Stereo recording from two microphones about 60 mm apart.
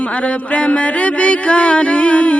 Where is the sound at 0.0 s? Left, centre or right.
Left.